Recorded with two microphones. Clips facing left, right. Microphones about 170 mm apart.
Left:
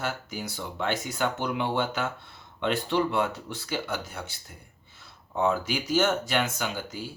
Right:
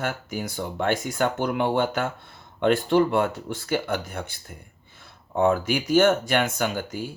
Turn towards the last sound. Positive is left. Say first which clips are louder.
# right 6 dB
turn(degrees=-50)  # may be behind; listen again after turning